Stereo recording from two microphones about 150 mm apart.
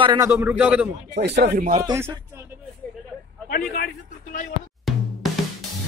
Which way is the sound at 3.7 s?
70° left (ahead or behind).